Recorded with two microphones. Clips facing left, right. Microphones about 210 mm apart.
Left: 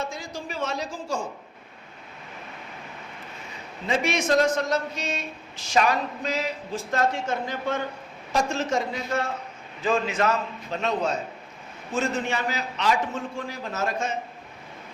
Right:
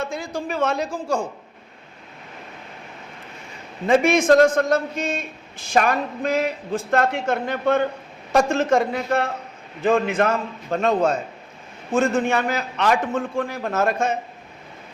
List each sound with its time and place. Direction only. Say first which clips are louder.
0.0 s a man's voice: right 6 dB; 60° right (ahead or behind)
3.8 s a man's voice: right 9 dB; 50° right (ahead or behind)